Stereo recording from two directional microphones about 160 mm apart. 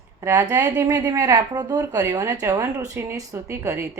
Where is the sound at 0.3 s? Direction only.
20° right (ahead or behind).